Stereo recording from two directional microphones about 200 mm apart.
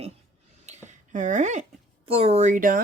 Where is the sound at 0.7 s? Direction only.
40° right (ahead or behind).